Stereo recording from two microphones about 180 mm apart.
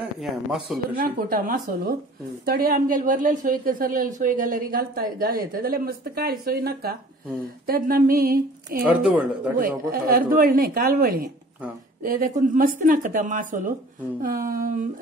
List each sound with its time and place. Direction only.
0.2 s speech: centre (ahead or behind)
0.9 s a woman's voice: 55° right (ahead or behind)
9.0 s speech: 5° right (ahead or behind)
9.8 s a woman's voice: 55° right (ahead or behind)